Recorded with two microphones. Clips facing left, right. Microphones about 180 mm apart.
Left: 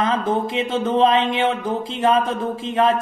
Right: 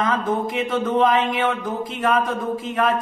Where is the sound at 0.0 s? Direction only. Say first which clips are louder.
Left 1 dB; 25° left (ahead or behind).